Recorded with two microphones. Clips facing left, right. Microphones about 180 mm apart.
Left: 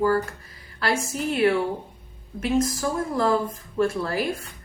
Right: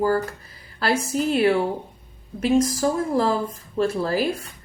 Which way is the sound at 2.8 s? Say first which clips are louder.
Right 4 dB; 35° right (ahead or behind).